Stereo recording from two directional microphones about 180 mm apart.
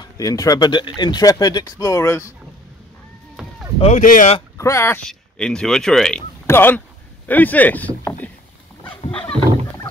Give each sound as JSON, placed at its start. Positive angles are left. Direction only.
{"t": 0.0, "sound": "speech", "side_deg": 20}
{"t": 3.4, "sound": "rowboat", "side_deg": -5}
{"t": 3.8, "sound": "speech", "side_deg": 45}
{"t": 4.6, "sound": "speech", "side_deg": 15}
{"t": 5.0, "sound": "speech", "side_deg": 5}